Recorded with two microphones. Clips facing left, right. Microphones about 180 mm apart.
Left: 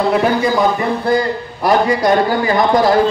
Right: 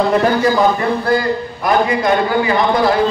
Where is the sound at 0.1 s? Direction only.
10° left (ahead or behind).